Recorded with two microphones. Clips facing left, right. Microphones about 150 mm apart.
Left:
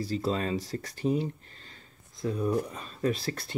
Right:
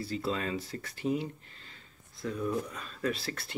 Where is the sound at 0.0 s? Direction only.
40° left (ahead or behind).